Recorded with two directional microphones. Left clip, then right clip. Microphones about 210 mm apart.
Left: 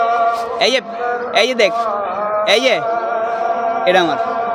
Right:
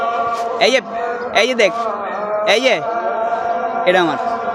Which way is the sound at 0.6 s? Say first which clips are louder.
Right 1 dB; centre (ahead or behind).